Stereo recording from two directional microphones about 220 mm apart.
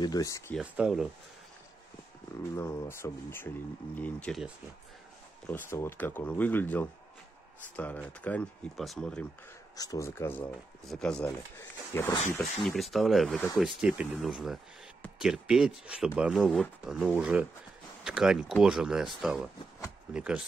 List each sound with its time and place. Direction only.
0.0 s speech: 15° left (ahead or behind)
0.6 s speech: 5° right (ahead or behind)
2.5 s speech: 10° left (ahead or behind)
5.5 s speech: 10° left (ahead or behind)
9.8 s speech: 15° left (ahead or behind)
12.5 s speech: centre (ahead or behind)